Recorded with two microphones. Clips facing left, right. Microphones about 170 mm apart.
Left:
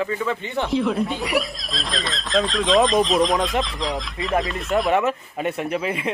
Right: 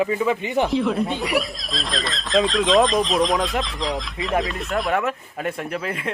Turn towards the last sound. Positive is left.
turn(degrees=5)  # may be behind; listen again after turning